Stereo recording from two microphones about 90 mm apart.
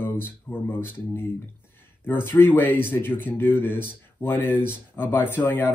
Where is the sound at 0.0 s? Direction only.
25° left (ahead or behind).